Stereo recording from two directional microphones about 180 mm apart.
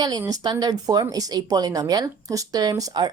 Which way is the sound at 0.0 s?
20° right (ahead or behind).